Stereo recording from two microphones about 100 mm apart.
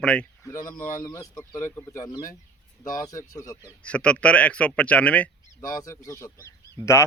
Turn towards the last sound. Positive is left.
turn(degrees=25)  # may be behind; listen again after turning